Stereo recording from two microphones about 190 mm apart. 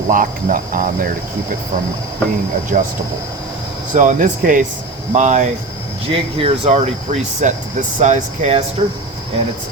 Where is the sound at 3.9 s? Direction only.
40° right (ahead or behind).